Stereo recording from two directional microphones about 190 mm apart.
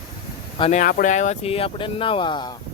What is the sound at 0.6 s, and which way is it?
Speech, 40° left (ahead or behind).